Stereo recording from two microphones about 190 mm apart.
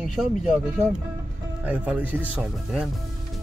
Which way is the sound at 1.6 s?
5° right (ahead or behind).